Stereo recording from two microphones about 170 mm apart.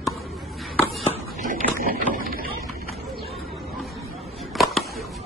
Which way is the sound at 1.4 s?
55° right (ahead or behind).